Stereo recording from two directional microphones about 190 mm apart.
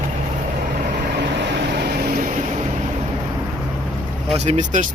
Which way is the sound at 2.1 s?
40° right (ahead or behind).